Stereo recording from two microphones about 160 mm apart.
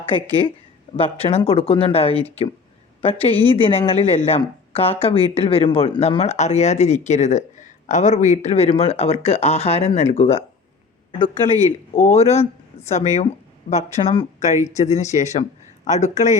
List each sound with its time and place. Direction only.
0.1 s speech: 30° left (ahead or behind)